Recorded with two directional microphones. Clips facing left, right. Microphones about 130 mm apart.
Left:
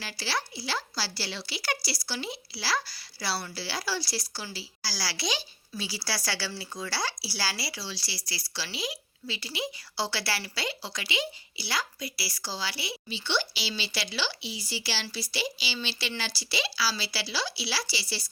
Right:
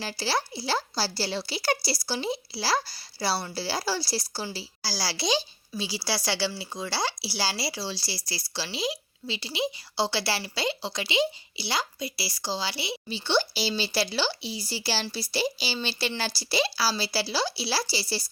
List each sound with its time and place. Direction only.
0.0 s speech: 35° right (ahead or behind)
13.1 s speech: 35° right (ahead or behind)